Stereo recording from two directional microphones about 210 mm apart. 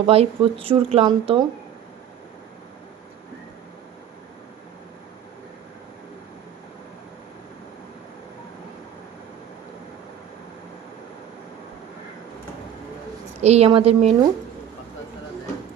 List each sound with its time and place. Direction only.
0.0 s speech: 30° right (ahead or behind)
13.4 s speech: 30° right (ahead or behind)